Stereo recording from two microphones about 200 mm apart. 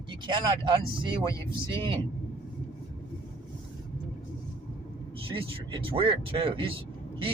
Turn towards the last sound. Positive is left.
turn(degrees=-25)  # may be behind; listen again after turning